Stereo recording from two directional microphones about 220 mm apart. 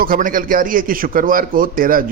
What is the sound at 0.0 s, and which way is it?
A man's voice, 40° right (ahead or behind).